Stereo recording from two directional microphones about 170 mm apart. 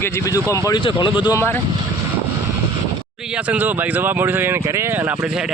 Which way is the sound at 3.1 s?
5° right (ahead or behind).